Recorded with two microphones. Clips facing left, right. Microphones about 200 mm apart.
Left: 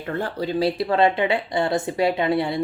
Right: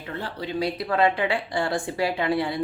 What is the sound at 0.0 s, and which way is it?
Speech, 50° left (ahead or behind).